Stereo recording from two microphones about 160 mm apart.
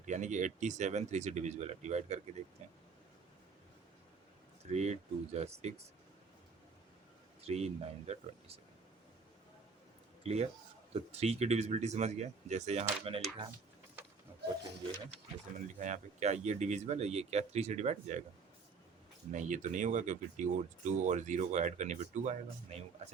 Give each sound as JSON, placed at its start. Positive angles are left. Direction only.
{"t": 0.0, "sound": "speech", "side_deg": -50}
{"t": 4.7, "sound": "speech", "side_deg": -45}
{"t": 7.4, "sound": "speech", "side_deg": -40}
{"t": 10.2, "sound": "speech", "side_deg": -40}
{"t": 15.5, "sound": "speech", "side_deg": -50}
{"t": 19.3, "sound": "speech", "side_deg": -50}